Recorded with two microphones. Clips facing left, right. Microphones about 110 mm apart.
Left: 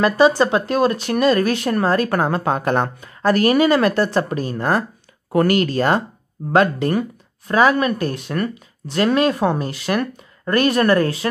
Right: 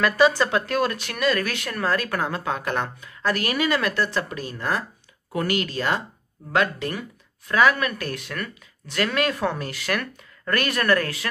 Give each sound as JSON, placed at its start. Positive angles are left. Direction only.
{"t": 0.0, "sound": "speech", "side_deg": 25}
{"t": 7.5, "sound": "speech", "side_deg": 30}